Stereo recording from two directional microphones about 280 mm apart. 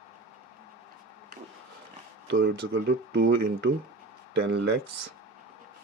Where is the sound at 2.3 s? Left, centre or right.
Right.